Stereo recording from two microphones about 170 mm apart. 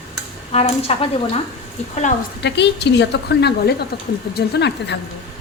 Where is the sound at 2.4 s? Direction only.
90° left.